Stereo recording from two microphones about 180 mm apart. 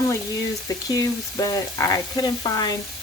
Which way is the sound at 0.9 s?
20° left (ahead or behind).